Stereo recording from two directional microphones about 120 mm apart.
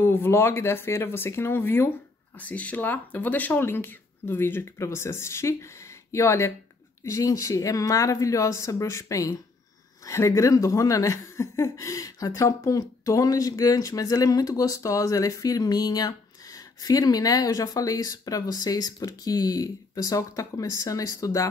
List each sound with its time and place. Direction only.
0.0 s speech: 20° left (ahead or behind)